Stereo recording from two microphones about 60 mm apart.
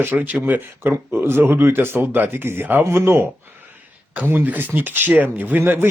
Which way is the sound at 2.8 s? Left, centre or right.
Right.